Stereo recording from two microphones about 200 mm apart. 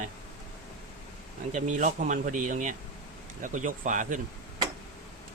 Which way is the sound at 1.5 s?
35° right (ahead or behind).